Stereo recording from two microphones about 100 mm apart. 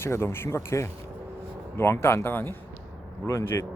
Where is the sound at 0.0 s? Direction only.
25° left (ahead or behind).